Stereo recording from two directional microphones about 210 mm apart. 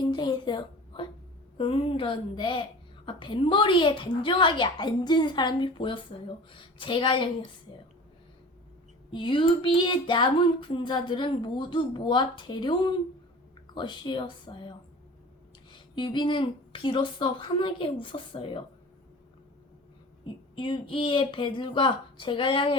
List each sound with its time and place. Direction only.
0.0 s a woman's voice: 20° left (ahead or behind)
9.1 s a woman's voice: 25° left (ahead or behind)
20.2 s a woman's voice: 25° left (ahead or behind)